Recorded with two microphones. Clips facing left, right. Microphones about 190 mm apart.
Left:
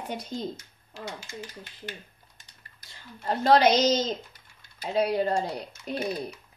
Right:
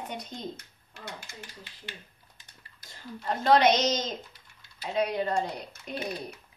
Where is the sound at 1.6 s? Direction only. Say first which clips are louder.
Left 5 dB; 45° left (ahead or behind).